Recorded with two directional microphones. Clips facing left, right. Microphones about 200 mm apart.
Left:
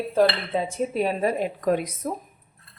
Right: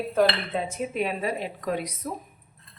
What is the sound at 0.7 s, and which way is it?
Speech, 40° left (ahead or behind).